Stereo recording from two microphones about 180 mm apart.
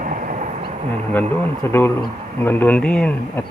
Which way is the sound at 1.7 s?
10° left (ahead or behind).